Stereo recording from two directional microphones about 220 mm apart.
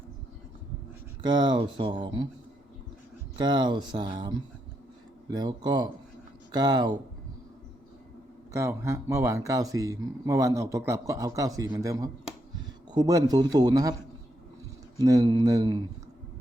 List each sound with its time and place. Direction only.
1.2 s speech: 20° right (ahead or behind)
3.3 s speech: 20° right (ahead or behind)
8.5 s speech: 10° right (ahead or behind)
14.9 s speech: 15° right (ahead or behind)